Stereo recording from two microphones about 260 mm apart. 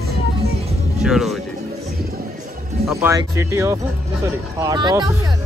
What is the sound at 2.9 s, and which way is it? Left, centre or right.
Speech, centre.